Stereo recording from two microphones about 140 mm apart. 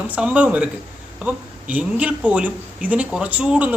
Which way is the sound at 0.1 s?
10° right (ahead or behind).